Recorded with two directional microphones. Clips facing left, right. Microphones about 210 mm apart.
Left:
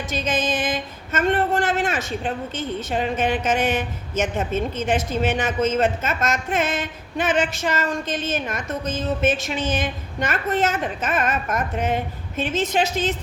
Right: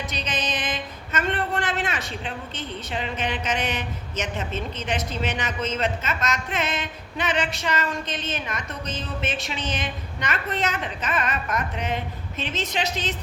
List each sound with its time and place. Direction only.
0.1 s a woman's voice: 50° left (ahead or behind)